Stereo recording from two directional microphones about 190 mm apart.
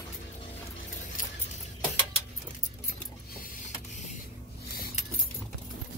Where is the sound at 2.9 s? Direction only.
50° left (ahead or behind).